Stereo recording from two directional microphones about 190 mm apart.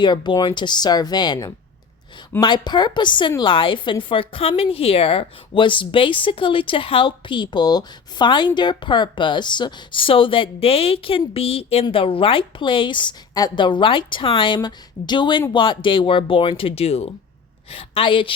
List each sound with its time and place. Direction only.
0.0 s a woman's voice: 25° left (ahead or behind)